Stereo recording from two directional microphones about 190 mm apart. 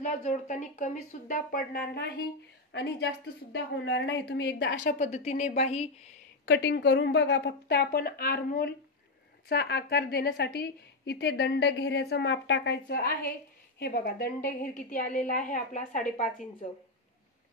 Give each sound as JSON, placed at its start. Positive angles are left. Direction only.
{"t": 0.0, "sound": "a woman's voice", "side_deg": 40}
{"t": 4.9, "sound": "a woman's voice", "side_deg": 35}
{"t": 6.4, "sound": "a woman's voice", "side_deg": 85}